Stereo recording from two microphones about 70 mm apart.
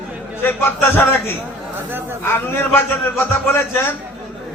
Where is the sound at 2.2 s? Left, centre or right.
Left.